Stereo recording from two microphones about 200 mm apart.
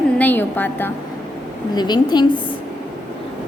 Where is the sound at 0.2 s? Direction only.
10° left (ahead or behind).